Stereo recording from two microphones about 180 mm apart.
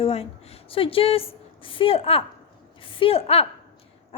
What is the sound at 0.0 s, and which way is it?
A woman's voice, 35° left (ahead or behind).